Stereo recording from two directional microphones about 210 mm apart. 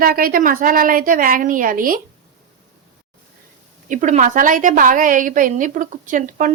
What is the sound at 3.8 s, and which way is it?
A woman's voice, 35° right (ahead or behind).